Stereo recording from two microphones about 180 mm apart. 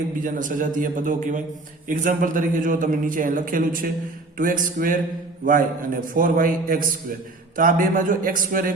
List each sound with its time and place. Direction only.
0.3 s a man's voice: 45° right (ahead or behind)